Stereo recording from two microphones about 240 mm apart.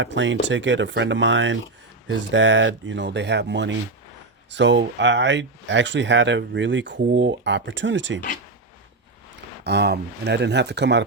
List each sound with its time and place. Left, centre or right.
0.0 s speech: right
9.6 s speech: right